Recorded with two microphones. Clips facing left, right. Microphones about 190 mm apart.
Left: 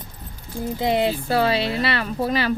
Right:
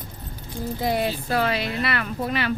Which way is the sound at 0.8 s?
25° left (ahead or behind).